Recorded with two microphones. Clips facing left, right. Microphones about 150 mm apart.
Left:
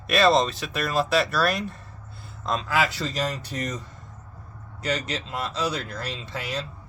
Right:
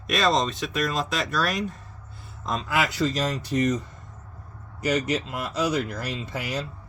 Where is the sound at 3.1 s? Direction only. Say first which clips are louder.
Right 1 dB; 45° right (ahead or behind).